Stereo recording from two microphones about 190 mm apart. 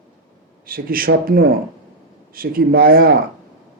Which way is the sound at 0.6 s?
50° right (ahead or behind).